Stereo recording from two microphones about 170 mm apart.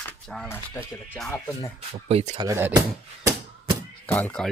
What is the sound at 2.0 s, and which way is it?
Speech, 35° right (ahead or behind).